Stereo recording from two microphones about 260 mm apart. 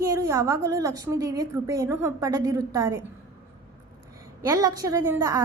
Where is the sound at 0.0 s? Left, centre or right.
Centre.